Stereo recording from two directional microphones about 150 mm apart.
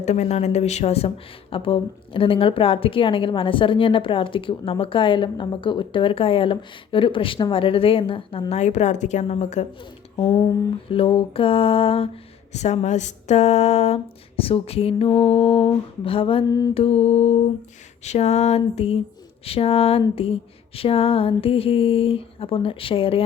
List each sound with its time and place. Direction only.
0.0 s a woman's voice: 50° left (ahead or behind)
10.8 s speech: 40° left (ahead or behind)
12.5 s speech: 50° left (ahead or behind)
16.5 s mantra: 25° left (ahead or behind)
16.7 s a woman's voice: 40° left (ahead or behind)